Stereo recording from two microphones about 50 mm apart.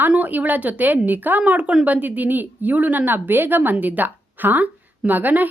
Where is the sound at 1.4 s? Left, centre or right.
Right.